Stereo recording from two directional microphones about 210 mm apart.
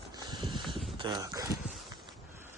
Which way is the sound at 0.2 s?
20° right (ahead or behind).